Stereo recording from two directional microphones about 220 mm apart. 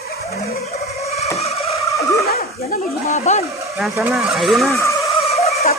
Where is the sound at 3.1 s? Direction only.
30° left (ahead or behind).